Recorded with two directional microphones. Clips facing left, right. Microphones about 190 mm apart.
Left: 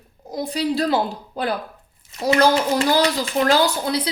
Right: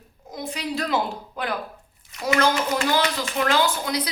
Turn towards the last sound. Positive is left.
turn(degrees=30)  # may be behind; listen again after turning